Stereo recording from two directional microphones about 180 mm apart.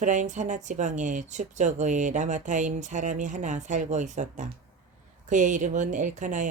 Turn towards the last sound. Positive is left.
turn(degrees=-45)  # may be behind; listen again after turning